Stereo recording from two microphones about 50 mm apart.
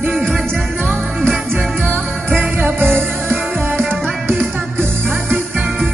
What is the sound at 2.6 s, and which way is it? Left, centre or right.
Music, right.